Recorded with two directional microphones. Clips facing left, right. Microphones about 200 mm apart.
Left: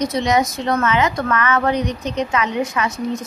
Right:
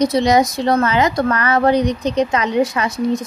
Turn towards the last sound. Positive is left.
turn(degrees=-35)  # may be behind; listen again after turning